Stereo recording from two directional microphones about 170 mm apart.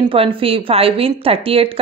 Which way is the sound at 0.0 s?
30° right (ahead or behind).